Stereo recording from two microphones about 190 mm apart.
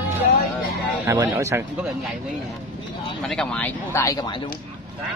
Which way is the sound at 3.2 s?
5° left (ahead or behind).